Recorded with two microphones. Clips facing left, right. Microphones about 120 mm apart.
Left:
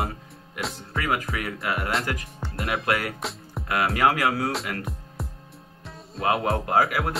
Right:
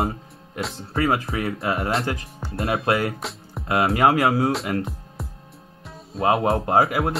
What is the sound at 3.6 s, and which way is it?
Speech, 25° right (ahead or behind).